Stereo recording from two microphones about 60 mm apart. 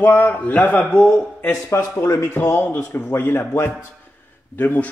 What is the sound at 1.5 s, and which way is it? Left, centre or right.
A man's voice, left.